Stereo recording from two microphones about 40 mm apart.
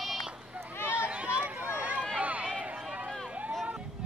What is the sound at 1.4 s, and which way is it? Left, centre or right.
Run, right.